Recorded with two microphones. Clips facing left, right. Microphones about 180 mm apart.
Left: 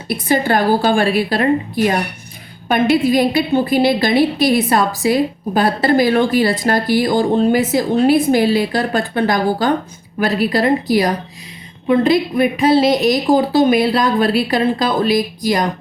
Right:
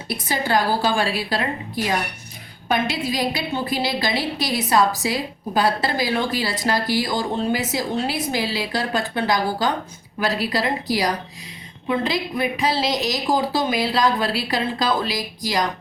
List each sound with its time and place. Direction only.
0.1 s a woman's voice: 55° left (ahead or behind)